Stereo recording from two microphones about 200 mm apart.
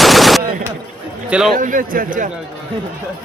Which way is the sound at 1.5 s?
40° right (ahead or behind).